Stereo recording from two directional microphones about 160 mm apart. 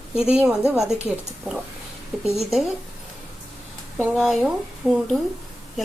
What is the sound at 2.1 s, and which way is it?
Speech, centre (ahead or behind).